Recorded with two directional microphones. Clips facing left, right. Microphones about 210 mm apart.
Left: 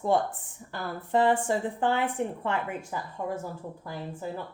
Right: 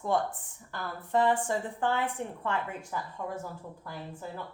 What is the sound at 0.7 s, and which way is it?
A woman's voice, 20° left (ahead or behind).